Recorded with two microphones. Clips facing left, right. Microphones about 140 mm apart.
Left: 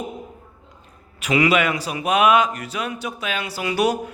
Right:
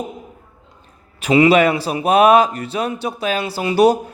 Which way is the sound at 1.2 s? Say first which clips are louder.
Right 6 dB; 30° right (ahead or behind).